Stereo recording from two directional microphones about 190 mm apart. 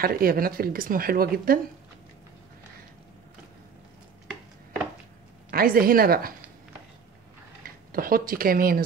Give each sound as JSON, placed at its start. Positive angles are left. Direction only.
{"t": 0.0, "sound": "speech", "side_deg": -50}
{"t": 5.5, "sound": "speech", "side_deg": -50}
{"t": 7.6, "sound": "speech", "side_deg": -50}